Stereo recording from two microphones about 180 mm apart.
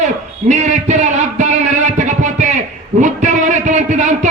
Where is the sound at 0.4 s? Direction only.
40° right (ahead or behind).